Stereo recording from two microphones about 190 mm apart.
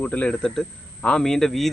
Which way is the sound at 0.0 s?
5° left (ahead or behind).